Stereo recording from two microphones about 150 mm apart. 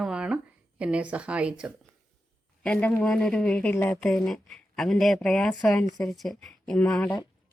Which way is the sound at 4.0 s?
5° left (ahead or behind).